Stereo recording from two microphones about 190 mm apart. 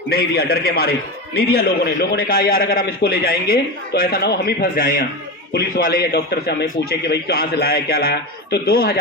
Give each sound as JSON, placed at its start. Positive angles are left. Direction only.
{"t": 0.1, "sound": "a man's voice", "side_deg": 55}